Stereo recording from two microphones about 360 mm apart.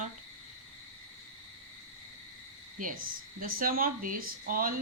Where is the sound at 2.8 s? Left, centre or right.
Right.